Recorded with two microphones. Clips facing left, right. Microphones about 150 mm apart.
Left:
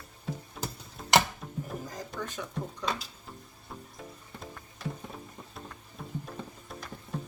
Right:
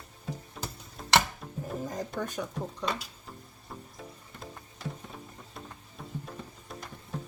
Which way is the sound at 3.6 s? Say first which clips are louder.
Even; centre (ahead or behind).